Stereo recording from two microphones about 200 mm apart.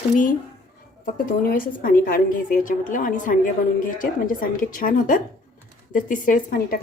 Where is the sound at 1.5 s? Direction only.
45° left (ahead or behind).